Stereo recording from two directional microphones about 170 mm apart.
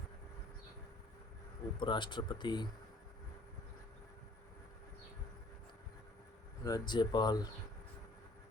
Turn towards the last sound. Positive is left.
turn(degrees=25)  # may be behind; listen again after turning